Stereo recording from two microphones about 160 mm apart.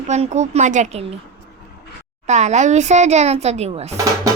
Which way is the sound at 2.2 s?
45° right (ahead or behind).